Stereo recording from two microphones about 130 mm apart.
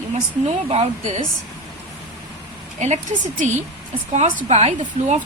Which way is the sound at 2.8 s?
65° right (ahead or behind).